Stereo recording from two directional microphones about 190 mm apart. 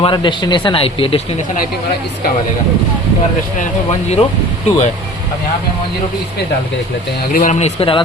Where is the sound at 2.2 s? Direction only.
55° left (ahead or behind).